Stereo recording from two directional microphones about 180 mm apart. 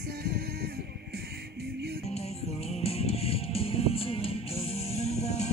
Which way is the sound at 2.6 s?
35° left (ahead or behind).